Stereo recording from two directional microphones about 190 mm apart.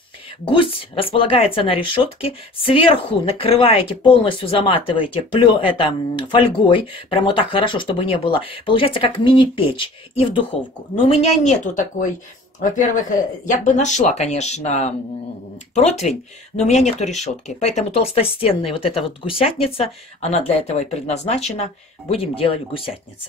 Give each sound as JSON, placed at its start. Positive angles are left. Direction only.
{"t": 0.5, "sound": "speech", "side_deg": 25}